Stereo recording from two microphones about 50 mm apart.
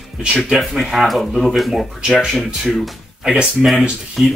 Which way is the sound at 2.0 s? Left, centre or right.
Centre.